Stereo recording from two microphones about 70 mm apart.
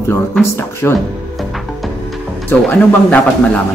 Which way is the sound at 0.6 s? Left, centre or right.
Left.